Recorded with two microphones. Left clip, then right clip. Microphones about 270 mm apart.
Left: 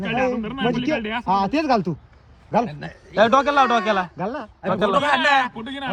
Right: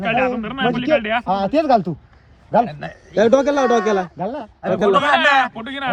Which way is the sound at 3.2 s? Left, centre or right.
Centre.